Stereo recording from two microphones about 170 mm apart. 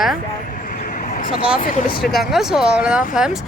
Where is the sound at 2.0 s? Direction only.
Centre (ahead or behind).